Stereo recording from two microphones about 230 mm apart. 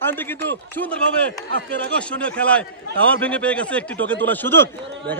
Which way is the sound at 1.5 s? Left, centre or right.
Right.